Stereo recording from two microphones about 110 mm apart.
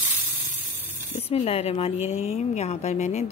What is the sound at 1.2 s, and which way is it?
A woman's voice, 65° left (ahead or behind).